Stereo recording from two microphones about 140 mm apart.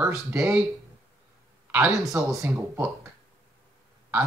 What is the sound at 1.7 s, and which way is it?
Speech, 15° right (ahead or behind).